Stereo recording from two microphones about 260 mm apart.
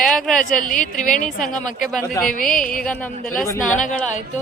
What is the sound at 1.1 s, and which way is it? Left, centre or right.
Speech, left.